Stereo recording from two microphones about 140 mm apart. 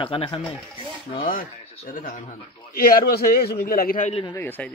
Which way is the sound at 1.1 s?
90° left.